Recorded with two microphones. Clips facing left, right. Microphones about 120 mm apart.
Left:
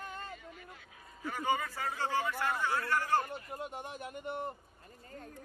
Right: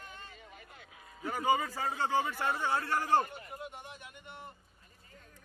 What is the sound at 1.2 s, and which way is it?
A man's voice, 15° right (ahead or behind).